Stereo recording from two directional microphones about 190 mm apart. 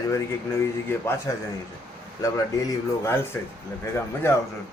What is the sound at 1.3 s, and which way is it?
Speech, 15° left (ahead or behind).